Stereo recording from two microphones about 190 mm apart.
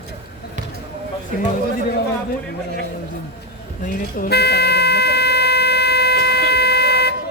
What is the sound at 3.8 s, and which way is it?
Vehicle horn, 50° left (ahead or behind).